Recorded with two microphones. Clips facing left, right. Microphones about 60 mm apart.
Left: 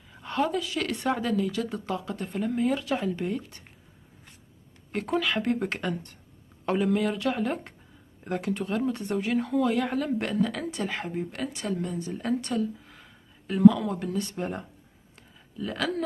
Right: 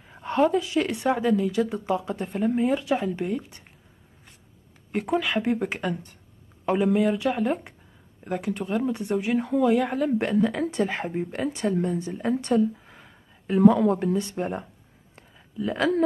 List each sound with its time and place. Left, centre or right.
0.1 s a woman's voice: right
0.9 s speech: centre
4.9 s speech: centre
10.4 s speech: right
12.1 s speech: centre
12.4 s speech: right
13.6 s speech: right
14.2 s speech: centre
15.7 s speech: right